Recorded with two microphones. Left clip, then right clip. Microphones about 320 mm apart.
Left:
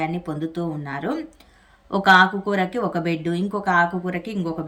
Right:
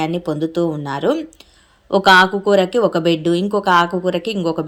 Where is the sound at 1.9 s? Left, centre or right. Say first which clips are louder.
Right 4 dB; centre.